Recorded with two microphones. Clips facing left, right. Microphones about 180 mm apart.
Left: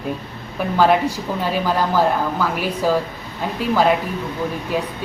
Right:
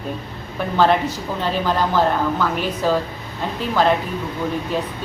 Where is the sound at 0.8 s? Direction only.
10° left (ahead or behind).